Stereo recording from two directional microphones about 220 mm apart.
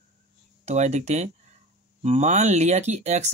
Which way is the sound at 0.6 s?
30° right (ahead or behind).